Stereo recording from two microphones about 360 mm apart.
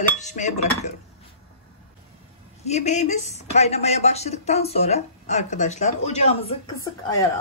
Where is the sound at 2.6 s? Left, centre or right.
Centre.